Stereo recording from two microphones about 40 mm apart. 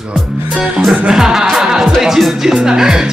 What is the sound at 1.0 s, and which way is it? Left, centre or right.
Music, centre.